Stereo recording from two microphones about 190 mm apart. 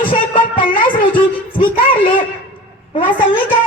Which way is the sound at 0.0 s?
25° left (ahead or behind).